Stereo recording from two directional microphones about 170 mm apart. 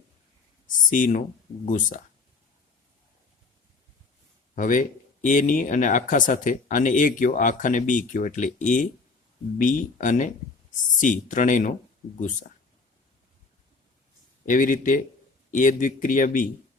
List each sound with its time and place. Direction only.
0.9 s speech: 50° left (ahead or behind)
4.5 s speech: 50° left (ahead or behind)
14.4 s speech: 50° left (ahead or behind)